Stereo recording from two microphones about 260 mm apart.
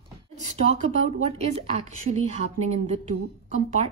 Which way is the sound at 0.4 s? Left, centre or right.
Right.